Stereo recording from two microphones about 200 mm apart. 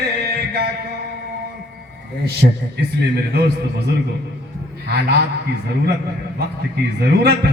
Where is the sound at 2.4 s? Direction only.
50° right (ahead or behind).